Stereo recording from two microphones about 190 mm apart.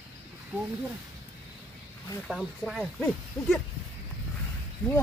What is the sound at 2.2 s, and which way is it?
Speech, centre (ahead or behind).